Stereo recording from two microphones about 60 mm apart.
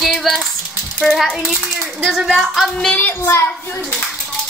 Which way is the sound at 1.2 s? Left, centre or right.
Centre.